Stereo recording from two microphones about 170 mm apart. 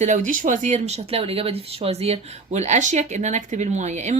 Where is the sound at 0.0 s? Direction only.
45° right (ahead or behind).